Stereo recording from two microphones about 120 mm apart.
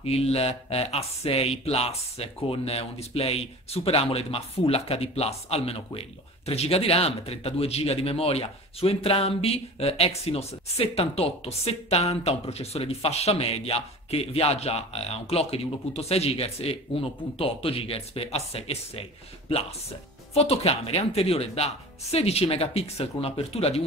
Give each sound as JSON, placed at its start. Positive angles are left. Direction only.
{"t": 0.0, "sound": "speech", "side_deg": 55}
{"t": 20.3, "sound": "speech", "side_deg": 55}